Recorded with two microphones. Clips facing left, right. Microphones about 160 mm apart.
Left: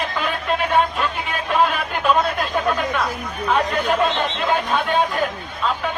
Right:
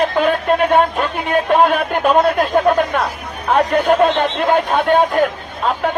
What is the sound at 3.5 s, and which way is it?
A man's voice, 55° right (ahead or behind).